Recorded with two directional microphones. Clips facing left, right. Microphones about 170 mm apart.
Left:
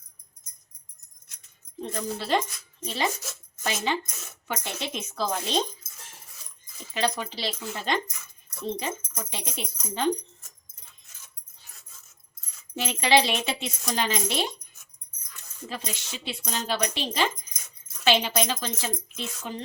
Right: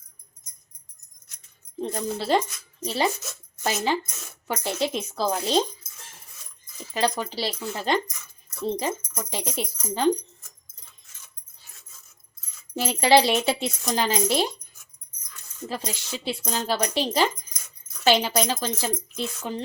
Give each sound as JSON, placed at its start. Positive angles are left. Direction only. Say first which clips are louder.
{"t": 1.8, "sound": "speech", "louder": "right 3 dB", "side_deg": -30}
{"t": 6.9, "sound": "speech", "louder": "right 3 dB", "side_deg": -35}
{"t": 12.7, "sound": "speech", "louder": "right 4 dB", "side_deg": -35}
{"t": 15.7, "sound": "speech", "louder": "right 4 dB", "side_deg": -35}